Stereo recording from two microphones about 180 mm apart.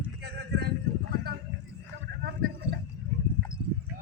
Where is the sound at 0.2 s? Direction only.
70° right (ahead or behind).